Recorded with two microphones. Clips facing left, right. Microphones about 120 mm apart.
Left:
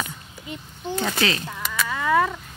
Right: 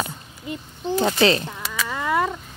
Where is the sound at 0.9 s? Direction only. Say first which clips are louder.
Right 6 dB; 30° right (ahead or behind).